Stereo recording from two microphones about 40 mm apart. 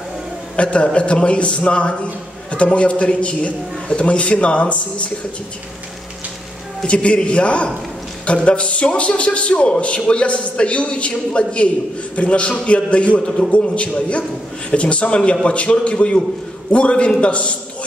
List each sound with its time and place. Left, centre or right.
0.6 s a man's voice: left
6.9 s a man's voice: left